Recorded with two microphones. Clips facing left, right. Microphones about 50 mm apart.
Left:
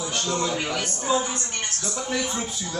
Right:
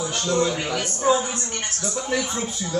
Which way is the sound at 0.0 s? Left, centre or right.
Centre.